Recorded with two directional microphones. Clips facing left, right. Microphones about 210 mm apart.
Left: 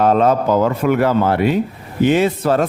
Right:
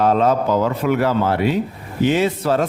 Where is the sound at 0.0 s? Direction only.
50° left (ahead or behind).